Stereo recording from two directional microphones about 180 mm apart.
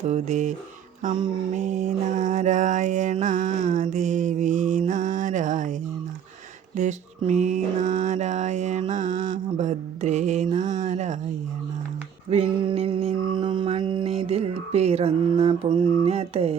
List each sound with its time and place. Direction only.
0.0 s mantra: 40° right (ahead or behind)
4.9 s music: 45° right (ahead or behind)
6.7 s mantra: 45° right (ahead or behind)
12.3 s mantra: 35° right (ahead or behind)